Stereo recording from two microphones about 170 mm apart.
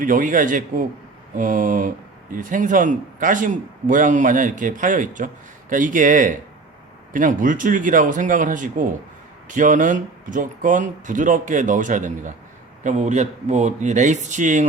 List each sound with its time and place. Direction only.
0.0 s a man's voice: 50° right (ahead or behind)